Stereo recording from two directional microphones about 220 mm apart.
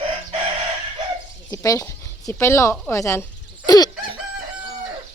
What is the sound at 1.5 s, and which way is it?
Speech, 15° left (ahead or behind).